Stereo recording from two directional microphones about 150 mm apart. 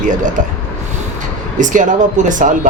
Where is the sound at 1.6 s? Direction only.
60° right (ahead or behind).